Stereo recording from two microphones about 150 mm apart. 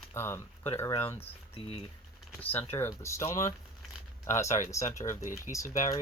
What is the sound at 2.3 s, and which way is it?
Speech, 15° left (ahead or behind).